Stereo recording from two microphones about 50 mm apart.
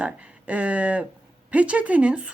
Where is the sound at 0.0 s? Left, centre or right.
Right.